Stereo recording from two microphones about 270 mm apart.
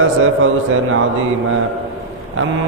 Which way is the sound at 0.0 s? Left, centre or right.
Right.